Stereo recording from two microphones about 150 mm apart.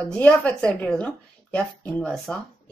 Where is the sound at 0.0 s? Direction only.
10° left (ahead or behind).